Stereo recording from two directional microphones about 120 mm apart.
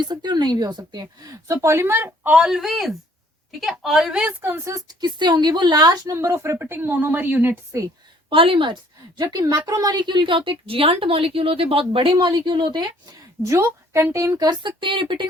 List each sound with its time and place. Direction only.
0.0 s a woman's voice: 40° right (ahead or behind)
6.1 s a woman's voice: 20° right (ahead or behind)
8.3 s a woman's voice: 45° right (ahead or behind)
13.4 s a woman's voice: 25° right (ahead or behind); by 15.3 s 45° right (ahead or behind)